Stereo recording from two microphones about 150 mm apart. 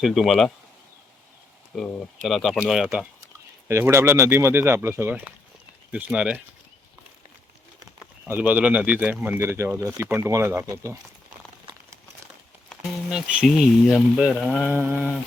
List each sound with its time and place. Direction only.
0.0 s speech: centre (ahead or behind)
1.7 s speech: centre (ahead or behind)
3.7 s speech: 20° right (ahead or behind)
8.3 s speech: 10° right (ahead or behind)
13.1 s speech: 5° right (ahead or behind)
14.7 s speech: 10° right (ahead or behind)